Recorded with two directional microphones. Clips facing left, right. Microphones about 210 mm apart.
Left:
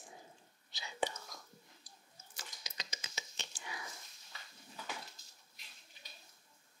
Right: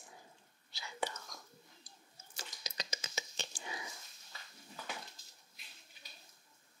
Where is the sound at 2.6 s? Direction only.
40° right (ahead or behind).